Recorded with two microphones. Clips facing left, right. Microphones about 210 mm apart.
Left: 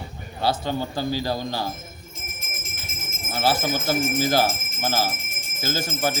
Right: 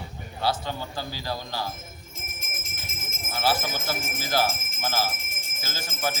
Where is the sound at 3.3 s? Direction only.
25° left (ahead or behind).